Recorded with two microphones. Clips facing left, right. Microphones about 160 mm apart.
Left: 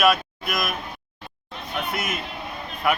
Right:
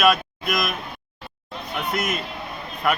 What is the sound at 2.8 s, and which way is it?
Speech, 5° left (ahead or behind).